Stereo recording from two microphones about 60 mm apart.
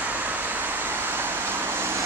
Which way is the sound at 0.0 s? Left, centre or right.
Right.